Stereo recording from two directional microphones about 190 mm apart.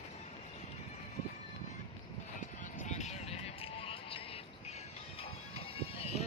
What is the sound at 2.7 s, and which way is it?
Vehicle, 40° left (ahead or behind).